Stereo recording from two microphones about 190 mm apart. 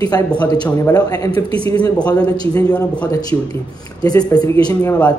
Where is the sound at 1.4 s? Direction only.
30° right (ahead or behind).